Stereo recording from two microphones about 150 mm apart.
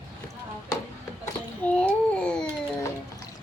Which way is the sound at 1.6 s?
10° left (ahead or behind).